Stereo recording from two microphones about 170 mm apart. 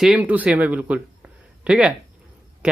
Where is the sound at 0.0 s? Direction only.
5° right (ahead or behind).